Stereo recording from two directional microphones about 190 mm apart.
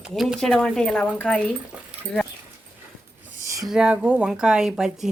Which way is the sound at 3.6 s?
5° right (ahead or behind).